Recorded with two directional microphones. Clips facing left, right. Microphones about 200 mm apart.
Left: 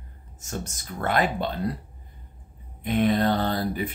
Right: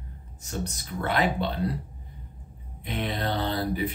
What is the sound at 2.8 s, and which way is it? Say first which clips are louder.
Speech: left 8 dB; 50° left (ahead or behind).